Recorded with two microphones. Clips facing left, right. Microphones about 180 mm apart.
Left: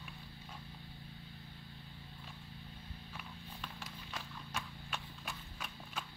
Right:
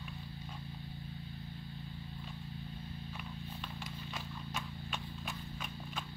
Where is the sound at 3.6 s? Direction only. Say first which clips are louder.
Right 4 dB; centre (ahead or behind).